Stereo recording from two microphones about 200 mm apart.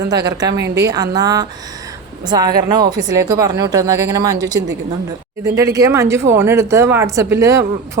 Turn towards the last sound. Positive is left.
turn(degrees=-15)  # may be behind; listen again after turning